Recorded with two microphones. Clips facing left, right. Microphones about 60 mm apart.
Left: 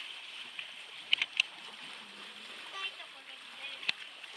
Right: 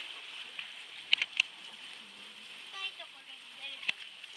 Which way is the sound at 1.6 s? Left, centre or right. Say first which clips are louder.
Left 2 dB; left.